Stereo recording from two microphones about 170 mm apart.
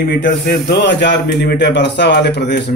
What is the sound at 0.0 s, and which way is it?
A man's voice, 70° left (ahead or behind).